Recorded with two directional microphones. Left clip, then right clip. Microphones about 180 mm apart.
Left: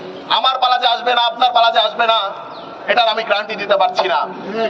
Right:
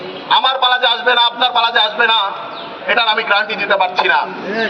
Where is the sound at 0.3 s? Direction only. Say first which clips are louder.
Right 2 dB; 35° left (ahead or behind).